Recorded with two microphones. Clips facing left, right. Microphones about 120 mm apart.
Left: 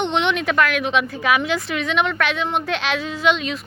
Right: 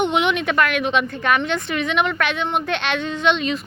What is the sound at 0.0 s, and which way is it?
A woman's voice, 5° right (ahead or behind).